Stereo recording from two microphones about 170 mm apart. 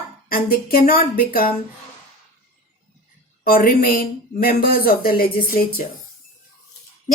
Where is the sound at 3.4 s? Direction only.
60° left (ahead or behind).